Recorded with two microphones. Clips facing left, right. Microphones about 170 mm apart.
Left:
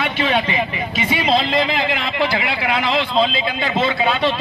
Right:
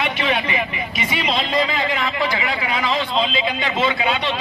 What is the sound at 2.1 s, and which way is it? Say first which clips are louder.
Speech: left 2 dB; 65° left (ahead or behind).